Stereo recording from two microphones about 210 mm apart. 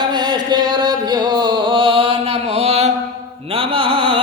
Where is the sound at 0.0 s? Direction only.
20° right (ahead or behind).